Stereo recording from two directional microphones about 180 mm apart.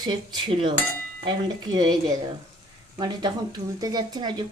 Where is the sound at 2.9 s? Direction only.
25° right (ahead or behind).